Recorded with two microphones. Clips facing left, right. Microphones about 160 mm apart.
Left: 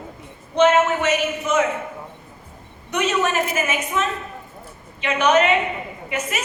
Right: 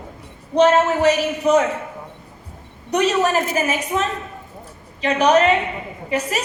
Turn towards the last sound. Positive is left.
turn(degrees=-35)  # may be behind; listen again after turning